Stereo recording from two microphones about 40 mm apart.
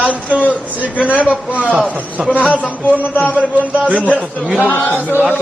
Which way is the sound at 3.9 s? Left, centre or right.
Right.